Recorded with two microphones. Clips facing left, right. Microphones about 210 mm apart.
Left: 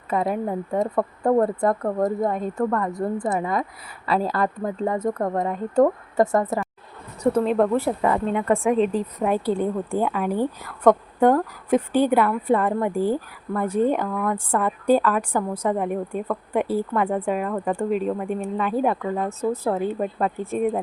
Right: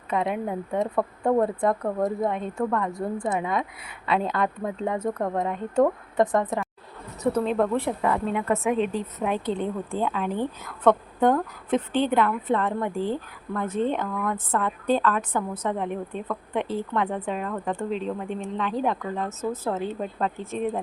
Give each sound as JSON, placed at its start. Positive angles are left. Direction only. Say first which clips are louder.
{"t": 0.1, "sound": "a woman's voice", "louder": "left 2 dB", "side_deg": 0}
{"t": 0.4, "sound": "speech", "louder": "left 3 dB", "side_deg": 40}
{"t": 0.9, "sound": "a woman's voice", "louder": "left 3 dB", "side_deg": 5}